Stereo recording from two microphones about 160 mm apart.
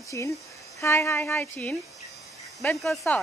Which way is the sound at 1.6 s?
Centre (ahead or behind).